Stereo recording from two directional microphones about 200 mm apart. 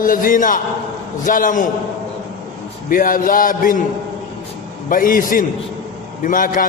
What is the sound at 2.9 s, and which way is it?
Speech, 45° left (ahead or behind).